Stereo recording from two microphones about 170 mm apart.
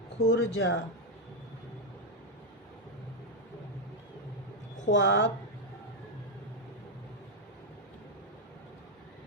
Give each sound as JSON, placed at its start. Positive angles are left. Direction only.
{"t": 0.3, "sound": "speech", "side_deg": 90}
{"t": 4.9, "sound": "speech", "side_deg": 90}